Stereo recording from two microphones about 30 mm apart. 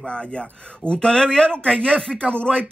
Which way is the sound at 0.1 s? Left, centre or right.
Left.